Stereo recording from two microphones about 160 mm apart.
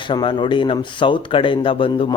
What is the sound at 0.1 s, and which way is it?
Speech, 30° left (ahead or behind).